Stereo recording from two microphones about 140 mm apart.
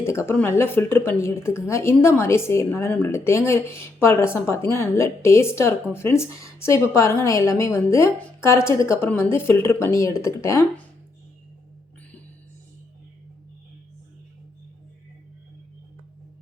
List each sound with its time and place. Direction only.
0.0 s a woman's voice: 20° left (ahead or behind)